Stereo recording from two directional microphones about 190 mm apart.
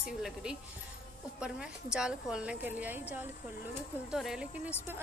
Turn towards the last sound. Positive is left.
turn(degrees=-5)  # may be behind; listen again after turning